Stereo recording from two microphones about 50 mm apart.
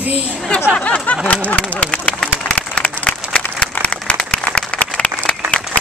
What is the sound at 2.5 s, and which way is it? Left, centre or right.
Applause, left.